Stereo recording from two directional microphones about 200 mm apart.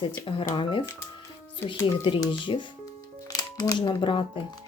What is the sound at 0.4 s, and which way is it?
Speech, 25° left (ahead or behind).